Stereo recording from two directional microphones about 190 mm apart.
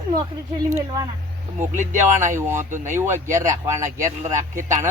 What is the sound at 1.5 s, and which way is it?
Speech, 40° right (ahead or behind).